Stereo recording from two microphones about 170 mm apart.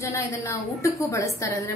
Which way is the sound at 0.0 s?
20° left (ahead or behind).